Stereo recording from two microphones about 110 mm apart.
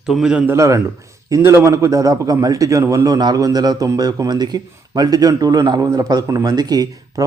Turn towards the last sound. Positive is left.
turn(degrees=-35)  # may be behind; listen again after turning